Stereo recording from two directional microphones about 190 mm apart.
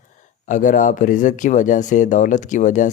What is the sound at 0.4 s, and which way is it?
Speech, 45° left (ahead or behind).